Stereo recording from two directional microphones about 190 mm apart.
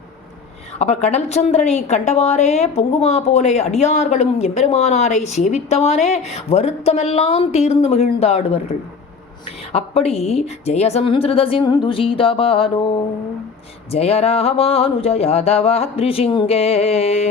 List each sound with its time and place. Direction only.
0.8 s a woman's voice: 35° left (ahead or behind)
9.7 s a woman's voice: 30° left (ahead or behind)
13.9 s a woman's voice: 35° left (ahead or behind)